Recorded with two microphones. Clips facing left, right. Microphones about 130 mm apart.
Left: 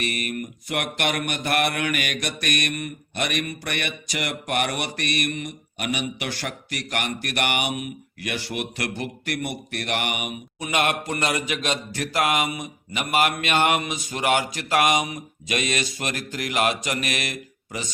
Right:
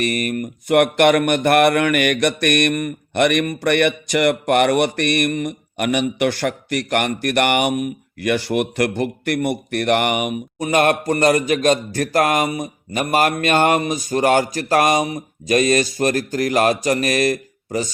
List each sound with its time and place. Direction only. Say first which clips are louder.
0.0 s speech: right 7 dB; 45° right (ahead or behind)